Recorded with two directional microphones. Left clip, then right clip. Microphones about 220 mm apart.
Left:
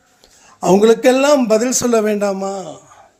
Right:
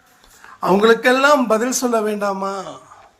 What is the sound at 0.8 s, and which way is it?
Speech, 55° left (ahead or behind).